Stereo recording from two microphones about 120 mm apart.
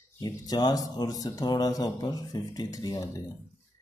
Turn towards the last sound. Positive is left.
turn(degrees=30)  # may be behind; listen again after turning